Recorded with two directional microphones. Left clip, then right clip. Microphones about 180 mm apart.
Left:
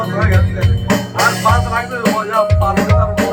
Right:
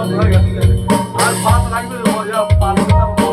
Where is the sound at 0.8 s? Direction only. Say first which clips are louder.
Left 1 dB; 20° right (ahead or behind).